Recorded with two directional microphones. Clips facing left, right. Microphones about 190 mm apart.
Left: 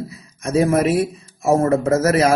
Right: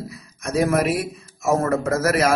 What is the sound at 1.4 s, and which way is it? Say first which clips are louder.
Speech: left 4 dB; 30° left (ahead or behind).